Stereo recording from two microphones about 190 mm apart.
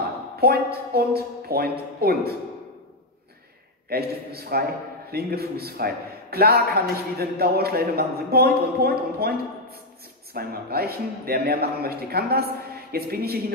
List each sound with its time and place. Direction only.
0.4 s a man's voice: 55° right (ahead or behind)
3.9 s a man's voice: 55° right (ahead or behind)